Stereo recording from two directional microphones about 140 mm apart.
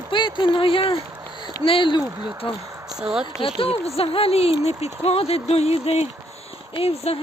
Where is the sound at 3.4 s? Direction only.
40° left (ahead or behind).